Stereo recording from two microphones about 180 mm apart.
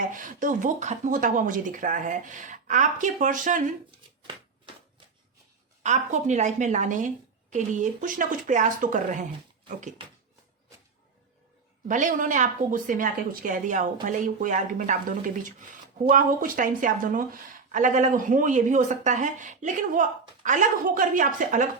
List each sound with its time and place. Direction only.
0.1 s speech: 45° right (ahead or behind)
5.8 s a woman's voice: 40° right (ahead or behind)
11.9 s speech: 45° right (ahead or behind)